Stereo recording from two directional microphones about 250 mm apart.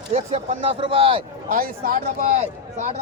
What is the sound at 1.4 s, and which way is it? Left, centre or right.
Speech, right.